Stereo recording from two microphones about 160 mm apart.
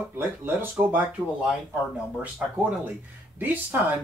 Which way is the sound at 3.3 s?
10° right (ahead or behind).